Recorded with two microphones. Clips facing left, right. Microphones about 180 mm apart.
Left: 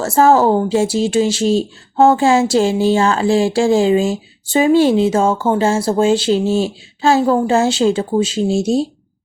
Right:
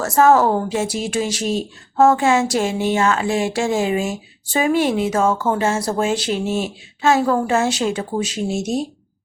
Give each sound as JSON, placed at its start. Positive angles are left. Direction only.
{"t": 0.0, "sound": "speech", "side_deg": 30}